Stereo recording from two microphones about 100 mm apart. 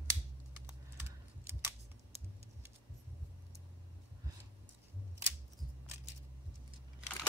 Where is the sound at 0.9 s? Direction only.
25° right (ahead or behind).